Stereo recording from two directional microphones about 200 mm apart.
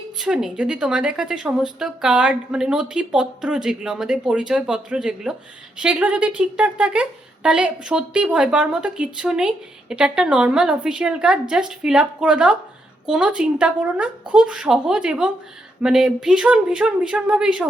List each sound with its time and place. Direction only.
0.2 s speech: 5° right (ahead or behind)